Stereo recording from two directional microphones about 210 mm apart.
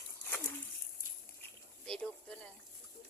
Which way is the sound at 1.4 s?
5° left (ahead or behind).